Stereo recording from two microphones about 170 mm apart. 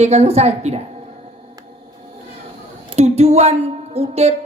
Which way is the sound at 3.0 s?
40° right (ahead or behind).